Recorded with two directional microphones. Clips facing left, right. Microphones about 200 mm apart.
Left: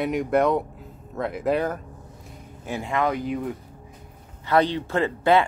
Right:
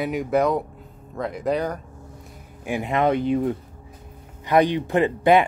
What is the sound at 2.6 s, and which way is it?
Speech, 15° right (ahead or behind).